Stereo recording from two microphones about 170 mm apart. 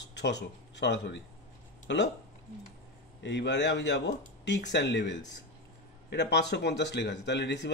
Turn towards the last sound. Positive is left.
turn(degrees=90)